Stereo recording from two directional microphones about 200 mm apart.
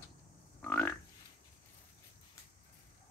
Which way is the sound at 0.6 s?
10° left (ahead or behind).